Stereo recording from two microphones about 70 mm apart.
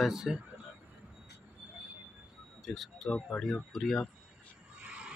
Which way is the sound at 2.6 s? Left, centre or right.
Centre.